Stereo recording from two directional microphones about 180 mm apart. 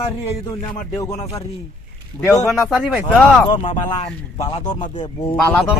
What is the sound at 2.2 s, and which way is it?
Speech, 15° left (ahead or behind).